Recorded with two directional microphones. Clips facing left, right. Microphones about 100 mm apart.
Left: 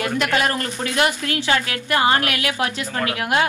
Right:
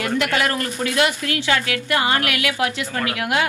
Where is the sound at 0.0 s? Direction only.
25° left (ahead or behind).